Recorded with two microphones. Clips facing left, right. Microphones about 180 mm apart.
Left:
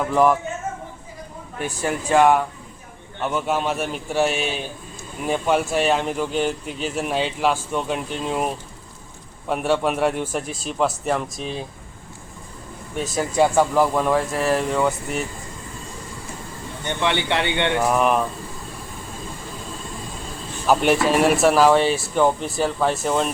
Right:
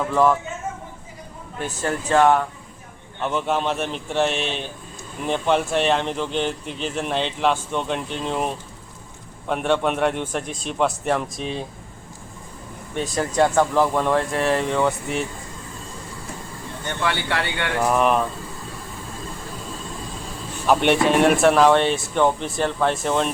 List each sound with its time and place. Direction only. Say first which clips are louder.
0.0 s speech: left 1 dB; 15° left (ahead or behind)
1.5 s a man's voice: left 1 dB; 10° left (ahead or behind)
12.9 s speech: even; 5° left (ahead or behind)
16.8 s speech: left 2 dB; 20° left (ahead or behind)
17.7 s speech: right 2 dB; centre (ahead or behind)
20.7 s speech: even; 5° left (ahead or behind)